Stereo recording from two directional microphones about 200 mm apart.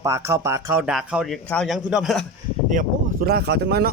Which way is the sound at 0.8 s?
5° right (ahead or behind).